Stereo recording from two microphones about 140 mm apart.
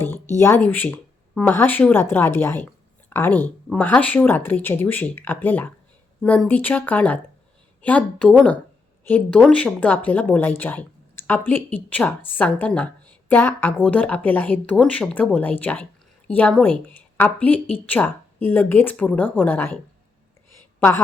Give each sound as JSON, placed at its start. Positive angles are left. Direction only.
{"t": 0.3, "sound": "a woman's voice", "side_deg": 15}